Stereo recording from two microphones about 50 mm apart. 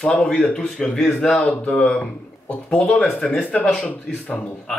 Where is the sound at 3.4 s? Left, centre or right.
Left.